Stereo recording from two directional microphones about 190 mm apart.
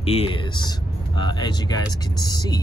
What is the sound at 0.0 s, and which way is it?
Speech, 30° left (ahead or behind).